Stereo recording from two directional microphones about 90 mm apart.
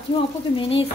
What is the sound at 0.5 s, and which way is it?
Speech, 90° left.